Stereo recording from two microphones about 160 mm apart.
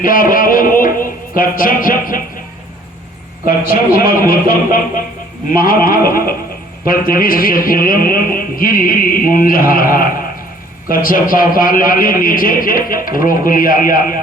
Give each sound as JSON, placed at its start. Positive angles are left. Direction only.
{"t": 0.0, "sound": "a sound", "side_deg": 60}
{"t": 1.4, "sound": "speech", "side_deg": 60}
{"t": 3.7, "sound": "speech", "side_deg": 65}